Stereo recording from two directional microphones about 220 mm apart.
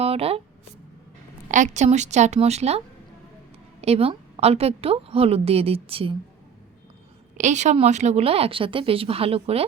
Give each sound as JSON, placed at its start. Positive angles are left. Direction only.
{"t": 0.0, "sound": "speech", "side_deg": -25}
{"t": 1.5, "sound": "a woman's voice", "side_deg": -35}
{"t": 7.3, "sound": "a woman's voice", "side_deg": -35}